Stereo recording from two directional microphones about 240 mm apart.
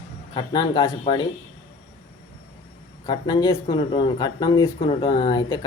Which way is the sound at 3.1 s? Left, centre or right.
Centre.